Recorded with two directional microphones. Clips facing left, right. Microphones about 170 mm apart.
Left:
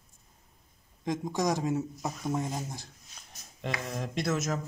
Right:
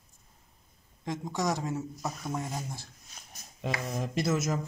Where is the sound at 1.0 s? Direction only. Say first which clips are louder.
Left 2 dB; 15° left (ahead or behind).